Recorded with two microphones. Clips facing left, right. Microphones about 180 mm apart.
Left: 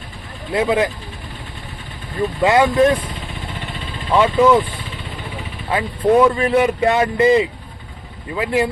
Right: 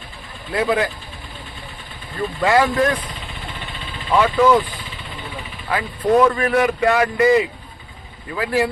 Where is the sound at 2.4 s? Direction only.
20° left (ahead or behind).